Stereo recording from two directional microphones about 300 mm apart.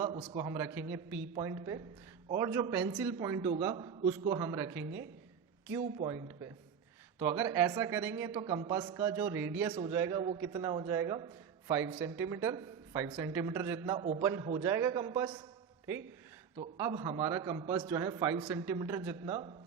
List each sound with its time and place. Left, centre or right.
0.0 s a man's voice: centre
16.7 s speech: centre